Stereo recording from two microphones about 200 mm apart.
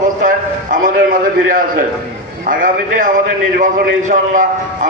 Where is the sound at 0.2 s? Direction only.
40° right (ahead or behind).